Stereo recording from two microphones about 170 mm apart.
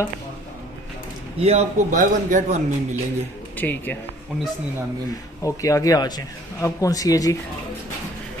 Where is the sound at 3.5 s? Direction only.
10° left (ahead or behind).